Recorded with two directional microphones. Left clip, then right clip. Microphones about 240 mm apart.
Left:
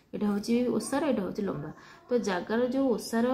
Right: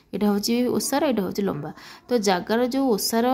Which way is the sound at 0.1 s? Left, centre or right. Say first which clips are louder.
Right 6 dB; right.